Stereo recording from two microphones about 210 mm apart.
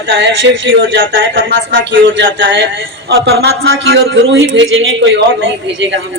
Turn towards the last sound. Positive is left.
turn(degrees=-60)  # may be behind; listen again after turning